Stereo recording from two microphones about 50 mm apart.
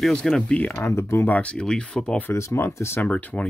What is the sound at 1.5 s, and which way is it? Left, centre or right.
Speech, centre.